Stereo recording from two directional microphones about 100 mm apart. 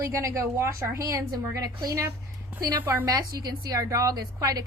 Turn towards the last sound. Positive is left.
turn(degrees=-35)  # may be behind; listen again after turning